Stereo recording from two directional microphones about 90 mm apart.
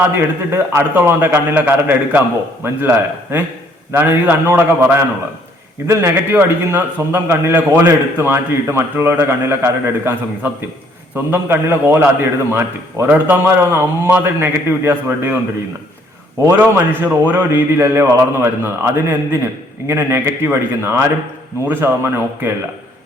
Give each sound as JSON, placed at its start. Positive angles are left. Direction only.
{"t": 0.2, "sound": "a man's voice", "side_deg": -30}
{"t": 16.5, "sound": "a man's voice", "side_deg": -20}